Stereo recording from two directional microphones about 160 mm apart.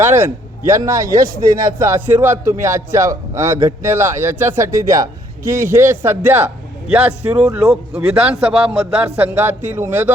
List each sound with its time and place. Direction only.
0.0 s a man's voice: 15° right (ahead or behind)